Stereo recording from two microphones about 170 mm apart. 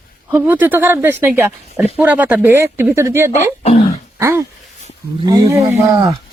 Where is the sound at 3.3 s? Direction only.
45° left (ahead or behind).